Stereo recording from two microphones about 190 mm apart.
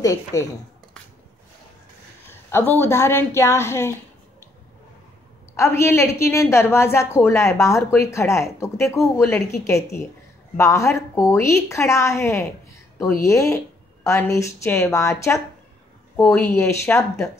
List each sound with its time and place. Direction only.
0.0 s a woman's voice: 20° left (ahead or behind)
2.2 s a woman's voice: 10° left (ahead or behind)
5.6 s a woman's voice: 15° left (ahead or behind)